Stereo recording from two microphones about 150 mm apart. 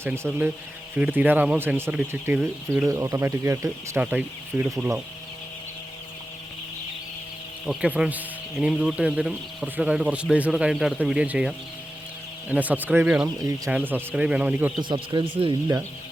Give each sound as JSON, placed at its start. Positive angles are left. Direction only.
{"t": 0.0, "sound": "speech", "side_deg": -15}
{"t": 2.8, "sound": "speech", "side_deg": -20}
{"t": 7.7, "sound": "speech", "side_deg": -5}
{"t": 13.2, "sound": "speech", "side_deg": -25}
{"t": 13.7, "sound": "speech", "side_deg": -10}
{"t": 14.8, "sound": "speech", "side_deg": -30}